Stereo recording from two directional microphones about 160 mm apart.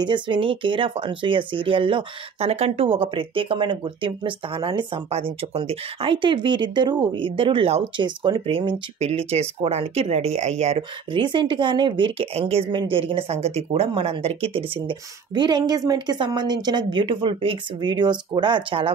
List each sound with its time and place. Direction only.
0.0 s speech: 30° right (ahead or behind)
10.8 s speech: 30° right (ahead or behind)